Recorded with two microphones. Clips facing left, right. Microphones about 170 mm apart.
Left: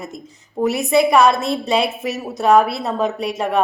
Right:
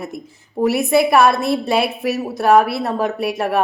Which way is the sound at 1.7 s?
5° right (ahead or behind).